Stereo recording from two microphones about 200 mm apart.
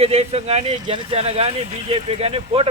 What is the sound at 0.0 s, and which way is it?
Speech, 30° right (ahead or behind).